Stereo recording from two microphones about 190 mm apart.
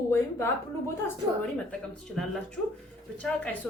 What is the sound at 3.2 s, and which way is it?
Speech, 5° left (ahead or behind).